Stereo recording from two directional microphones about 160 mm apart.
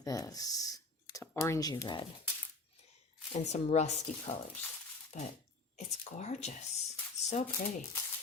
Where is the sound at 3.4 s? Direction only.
45° left (ahead or behind).